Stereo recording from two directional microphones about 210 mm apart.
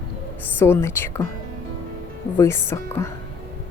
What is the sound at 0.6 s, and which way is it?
Speech, 10° left (ahead or behind).